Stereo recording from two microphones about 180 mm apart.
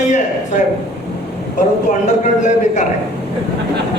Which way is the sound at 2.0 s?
40° left (ahead or behind).